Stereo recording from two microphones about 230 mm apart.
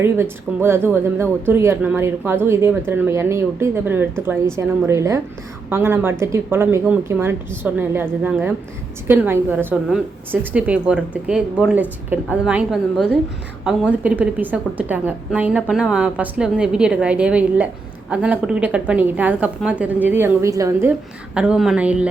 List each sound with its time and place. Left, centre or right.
0.0 s a woman's voice: centre
21.3 s a woman's voice: centre